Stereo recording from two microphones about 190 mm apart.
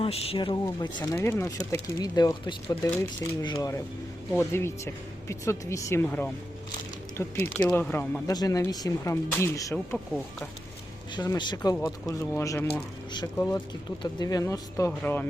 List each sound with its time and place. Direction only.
0.0 s speech: 30° left (ahead or behind); by 8.2 s 10° left (ahead or behind)
8.3 s speech: 20° left (ahead or behind)
11.1 s speech: 25° left (ahead or behind)